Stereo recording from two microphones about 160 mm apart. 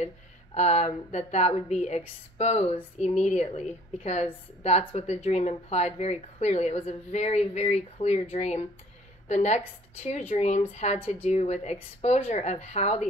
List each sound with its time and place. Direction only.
0.6 s a woman's voice: 45° left (ahead or behind)